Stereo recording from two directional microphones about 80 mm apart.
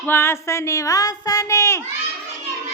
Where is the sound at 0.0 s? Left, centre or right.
Left.